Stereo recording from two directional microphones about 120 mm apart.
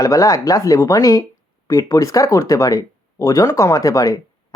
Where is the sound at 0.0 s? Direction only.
30° left (ahead or behind).